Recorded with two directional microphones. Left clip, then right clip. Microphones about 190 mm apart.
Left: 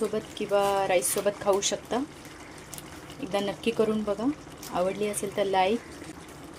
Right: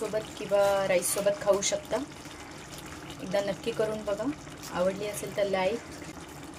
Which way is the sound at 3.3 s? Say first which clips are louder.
Even; 25° left (ahead or behind).